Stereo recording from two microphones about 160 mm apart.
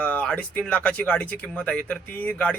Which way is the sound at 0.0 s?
10° left (ahead or behind).